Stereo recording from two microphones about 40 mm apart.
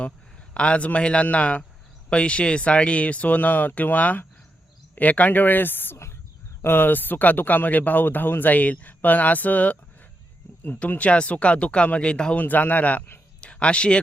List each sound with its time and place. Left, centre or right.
0.5 s a man's voice: left
8.5 s speech: left
10.8 s speech: left
12.4 s speech: left
13.4 s a sound: left